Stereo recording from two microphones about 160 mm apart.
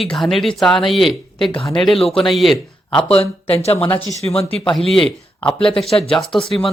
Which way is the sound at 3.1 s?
40° left (ahead or behind).